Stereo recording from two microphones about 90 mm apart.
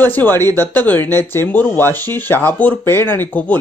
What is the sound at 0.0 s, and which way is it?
Speech, 20° left (ahead or behind).